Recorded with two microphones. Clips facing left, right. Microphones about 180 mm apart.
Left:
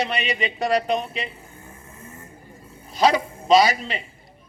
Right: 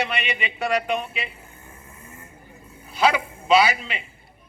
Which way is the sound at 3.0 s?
35° left (ahead or behind).